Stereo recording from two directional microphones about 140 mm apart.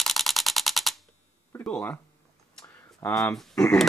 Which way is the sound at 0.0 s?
Centre (ahead or behind).